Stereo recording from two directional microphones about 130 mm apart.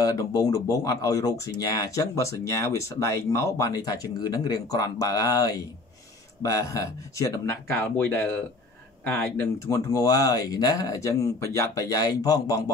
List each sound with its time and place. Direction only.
0.0 s speech: 30° left (ahead or behind)
7.8 s speech: 15° left (ahead or behind)